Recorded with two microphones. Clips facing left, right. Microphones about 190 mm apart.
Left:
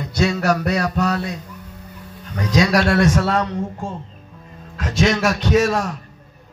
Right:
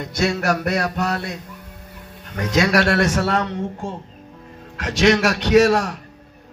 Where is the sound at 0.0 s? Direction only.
45° right (ahead or behind).